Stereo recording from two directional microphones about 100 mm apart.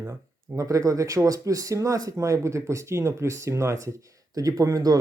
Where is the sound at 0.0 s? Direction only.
30° right (ahead or behind).